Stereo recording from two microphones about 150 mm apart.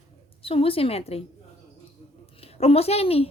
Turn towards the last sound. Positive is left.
turn(degrees=40)  # may be behind; listen again after turning